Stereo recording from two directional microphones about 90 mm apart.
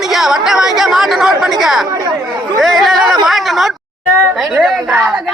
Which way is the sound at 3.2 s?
Centre (ahead or behind).